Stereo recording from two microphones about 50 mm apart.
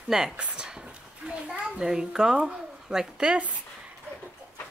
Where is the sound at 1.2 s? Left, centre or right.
Right.